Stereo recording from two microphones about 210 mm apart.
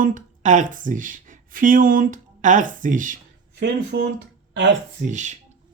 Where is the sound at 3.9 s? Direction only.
50° right (ahead or behind).